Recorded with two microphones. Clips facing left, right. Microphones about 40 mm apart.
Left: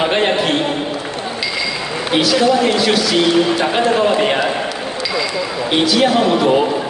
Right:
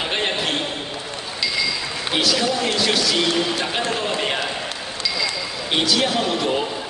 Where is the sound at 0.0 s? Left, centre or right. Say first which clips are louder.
Left 8 dB; centre.